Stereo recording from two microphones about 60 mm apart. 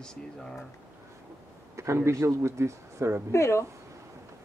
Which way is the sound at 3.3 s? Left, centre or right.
Left.